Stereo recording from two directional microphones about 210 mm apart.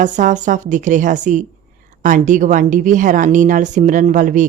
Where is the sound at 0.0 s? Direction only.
35° right (ahead or behind).